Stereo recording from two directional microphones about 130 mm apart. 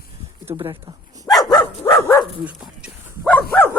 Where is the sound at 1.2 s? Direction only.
30° left (ahead or behind).